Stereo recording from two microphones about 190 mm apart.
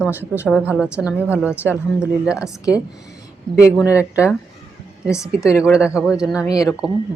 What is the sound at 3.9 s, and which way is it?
Speech, 5° right (ahead or behind).